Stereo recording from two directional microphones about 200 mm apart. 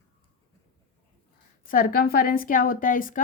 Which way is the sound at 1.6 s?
45° left (ahead or behind).